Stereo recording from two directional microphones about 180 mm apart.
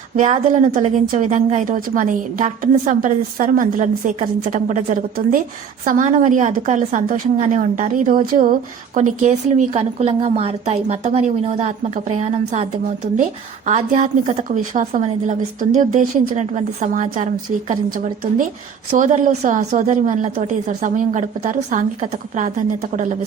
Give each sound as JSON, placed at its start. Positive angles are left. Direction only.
{"t": 0.2, "sound": "a woman's voice", "side_deg": -40}
{"t": 9.0, "sound": "a woman's voice", "side_deg": -40}
{"t": 13.7, "sound": "a woman's voice", "side_deg": -40}